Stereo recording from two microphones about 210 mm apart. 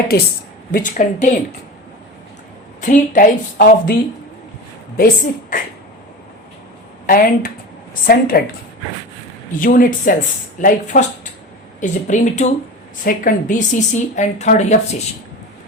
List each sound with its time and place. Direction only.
0.7 s a woman's voice: 40° left (ahead or behind)
2.8 s a woman's voice: 35° left (ahead or behind)
4.9 s a woman's voice: 40° left (ahead or behind)
7.1 s a woman's voice: 40° left (ahead or behind)
9.6 s a woman's voice: 40° left (ahead or behind)